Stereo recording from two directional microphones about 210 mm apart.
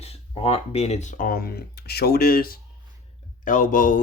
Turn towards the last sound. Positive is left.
turn(degrees=40)  # may be behind; listen again after turning